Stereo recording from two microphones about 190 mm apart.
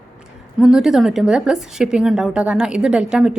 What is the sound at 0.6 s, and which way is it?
A woman's voice, centre (ahead or behind).